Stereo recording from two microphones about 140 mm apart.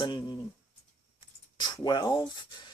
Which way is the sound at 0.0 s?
35° left (ahead or behind).